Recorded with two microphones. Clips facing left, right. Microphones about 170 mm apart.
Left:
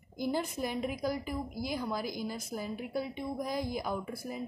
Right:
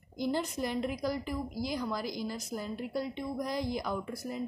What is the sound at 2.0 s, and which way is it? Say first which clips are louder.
Speech: even; 55° left (ahead or behind).